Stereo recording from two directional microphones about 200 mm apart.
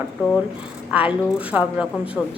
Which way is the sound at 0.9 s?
5° right (ahead or behind).